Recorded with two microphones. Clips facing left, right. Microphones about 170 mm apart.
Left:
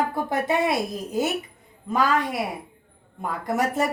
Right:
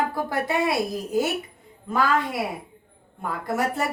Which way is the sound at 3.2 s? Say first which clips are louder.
Left 1 dB; 20° left (ahead or behind).